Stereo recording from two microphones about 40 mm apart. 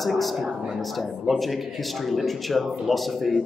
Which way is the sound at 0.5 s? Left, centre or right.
Right.